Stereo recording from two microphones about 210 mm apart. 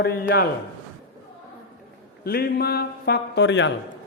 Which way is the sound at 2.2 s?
45° left (ahead or behind).